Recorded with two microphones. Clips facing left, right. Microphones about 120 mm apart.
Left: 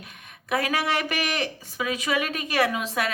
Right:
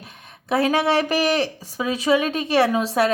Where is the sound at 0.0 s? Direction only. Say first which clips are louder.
Right 3 dB; 30° right (ahead or behind).